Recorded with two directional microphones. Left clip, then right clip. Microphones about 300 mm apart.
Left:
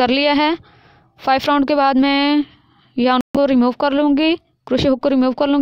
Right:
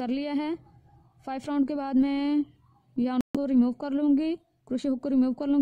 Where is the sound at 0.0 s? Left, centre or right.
Left.